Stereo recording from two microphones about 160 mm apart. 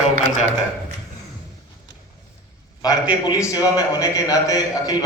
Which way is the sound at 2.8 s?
25° left (ahead or behind).